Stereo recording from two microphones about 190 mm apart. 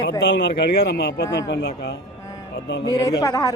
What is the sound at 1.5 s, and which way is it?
Speech, 60° left (ahead or behind).